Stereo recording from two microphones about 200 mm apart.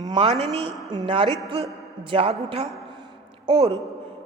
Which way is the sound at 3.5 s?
30° right (ahead or behind).